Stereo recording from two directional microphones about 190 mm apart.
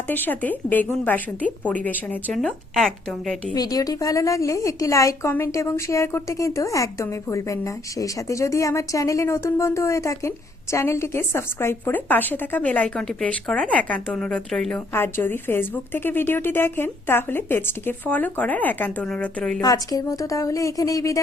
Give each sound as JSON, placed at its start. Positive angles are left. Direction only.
{"t": 0.1, "sound": "a woman's voice", "side_deg": 10}
{"t": 3.5, "sound": "a woman's voice", "side_deg": 20}
{"t": 19.6, "sound": "a woman's voice", "side_deg": 20}